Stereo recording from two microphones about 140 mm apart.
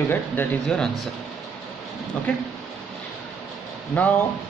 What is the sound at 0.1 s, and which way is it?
Speech, 10° left (ahead or behind).